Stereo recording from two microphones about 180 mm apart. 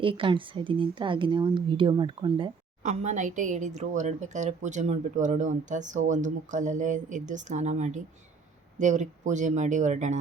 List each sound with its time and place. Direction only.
0.0 s speech: 30° right (ahead or behind)
2.8 s a woman's voice: 40° right (ahead or behind)